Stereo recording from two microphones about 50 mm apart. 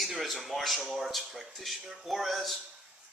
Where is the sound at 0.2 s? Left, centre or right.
Centre.